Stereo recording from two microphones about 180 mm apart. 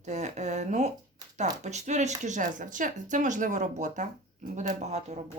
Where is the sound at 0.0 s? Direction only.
40° right (ahead or behind).